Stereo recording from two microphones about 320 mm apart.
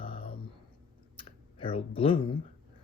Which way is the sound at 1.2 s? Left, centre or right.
Centre.